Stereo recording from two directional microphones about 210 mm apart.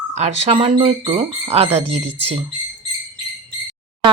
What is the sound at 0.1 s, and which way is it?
Speech, 30° right (ahead or behind).